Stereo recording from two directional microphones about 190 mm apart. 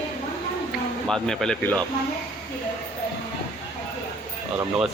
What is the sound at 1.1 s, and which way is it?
Speech, 5° left (ahead or behind).